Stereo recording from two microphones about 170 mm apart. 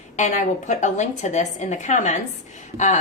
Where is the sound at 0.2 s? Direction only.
45° left (ahead or behind).